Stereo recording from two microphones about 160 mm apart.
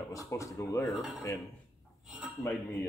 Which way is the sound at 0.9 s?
Centre (ahead or behind).